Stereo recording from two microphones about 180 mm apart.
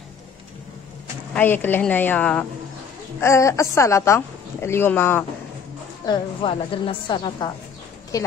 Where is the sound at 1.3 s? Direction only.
10° left (ahead or behind).